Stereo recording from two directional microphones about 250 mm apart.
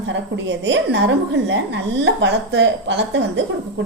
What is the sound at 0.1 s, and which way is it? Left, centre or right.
A woman's voice, right.